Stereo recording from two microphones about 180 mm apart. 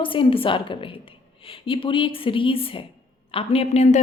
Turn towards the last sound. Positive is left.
turn(degrees=35)  # may be behind; listen again after turning